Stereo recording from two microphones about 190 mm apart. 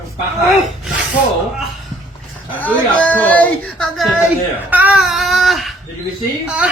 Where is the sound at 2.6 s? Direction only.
10° left (ahead or behind).